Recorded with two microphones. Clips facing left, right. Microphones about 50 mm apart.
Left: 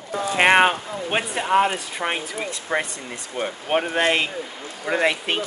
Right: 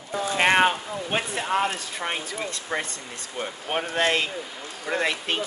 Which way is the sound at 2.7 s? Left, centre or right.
Centre.